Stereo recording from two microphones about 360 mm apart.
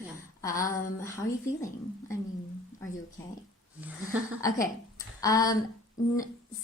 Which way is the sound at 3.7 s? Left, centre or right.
Centre.